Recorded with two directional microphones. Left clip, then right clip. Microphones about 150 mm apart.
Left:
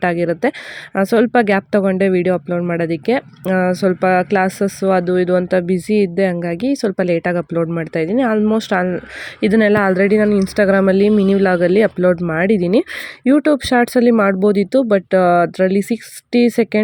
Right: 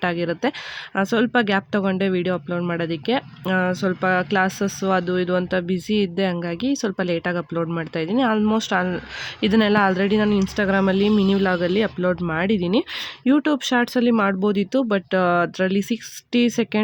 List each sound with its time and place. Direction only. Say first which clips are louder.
0.0 s speech: left 6 dB; 25° left (ahead or behind)